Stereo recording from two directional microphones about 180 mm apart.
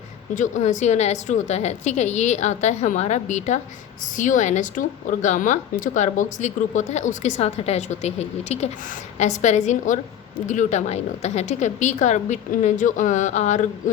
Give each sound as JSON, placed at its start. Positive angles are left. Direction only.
{"t": 0.3, "sound": "a woman's voice", "side_deg": 40}